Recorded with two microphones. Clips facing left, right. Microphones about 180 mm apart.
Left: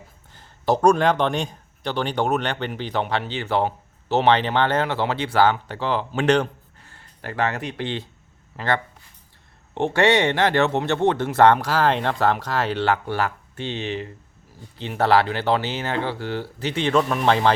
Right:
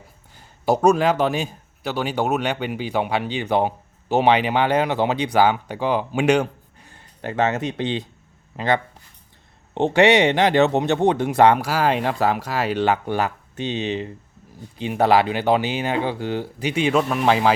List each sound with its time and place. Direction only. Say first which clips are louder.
0.3 s speech: right 1 dB; 10° right (ahead or behind)